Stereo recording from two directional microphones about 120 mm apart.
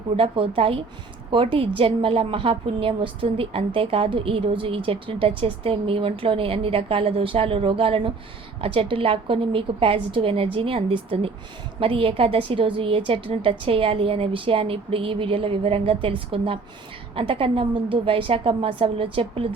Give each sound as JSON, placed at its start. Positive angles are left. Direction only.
{"t": 0.2, "sound": "a woman's voice", "side_deg": -50}